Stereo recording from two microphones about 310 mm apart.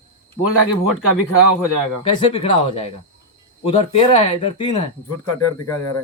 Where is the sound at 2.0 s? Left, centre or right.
Centre.